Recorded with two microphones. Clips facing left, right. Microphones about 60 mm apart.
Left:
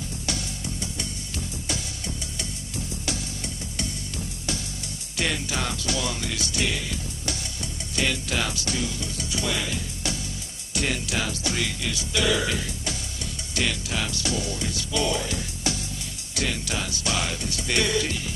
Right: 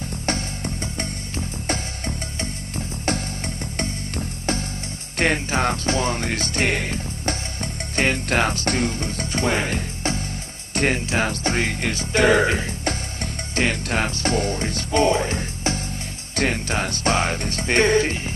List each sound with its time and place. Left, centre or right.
0.3 s music: right
16.3 s speech: right